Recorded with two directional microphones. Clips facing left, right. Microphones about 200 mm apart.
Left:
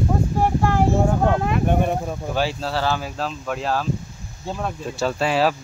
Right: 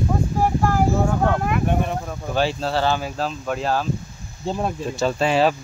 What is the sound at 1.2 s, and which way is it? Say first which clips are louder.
Speech: left 1 dB; 20° left (ahead or behind).